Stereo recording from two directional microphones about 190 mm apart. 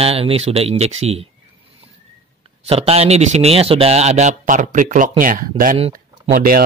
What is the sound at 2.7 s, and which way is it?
A man's voice, 30° right (ahead or behind).